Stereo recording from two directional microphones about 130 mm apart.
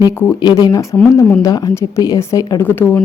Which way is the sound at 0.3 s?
35° left (ahead or behind).